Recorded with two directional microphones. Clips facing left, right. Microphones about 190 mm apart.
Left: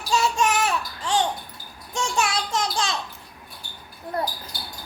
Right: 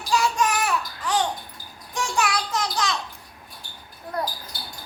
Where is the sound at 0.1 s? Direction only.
25° left (ahead or behind).